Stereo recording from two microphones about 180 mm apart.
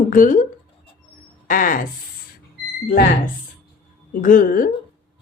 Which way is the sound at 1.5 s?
50° left (ahead or behind).